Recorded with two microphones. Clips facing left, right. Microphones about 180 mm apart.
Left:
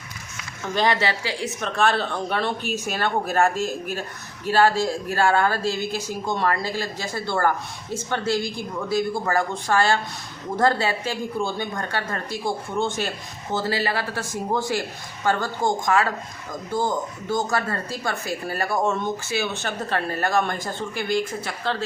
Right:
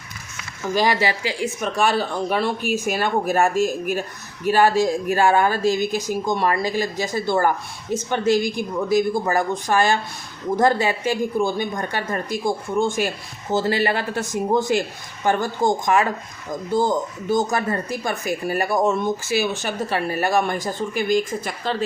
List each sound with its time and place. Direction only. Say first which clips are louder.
0.7 s speech: right 2 dB; 10° right (ahead or behind)
17.3 s speech: right 3 dB; 20° right (ahead or behind)